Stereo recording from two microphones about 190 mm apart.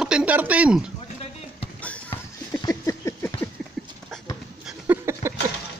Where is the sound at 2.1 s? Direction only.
20° left (ahead or behind).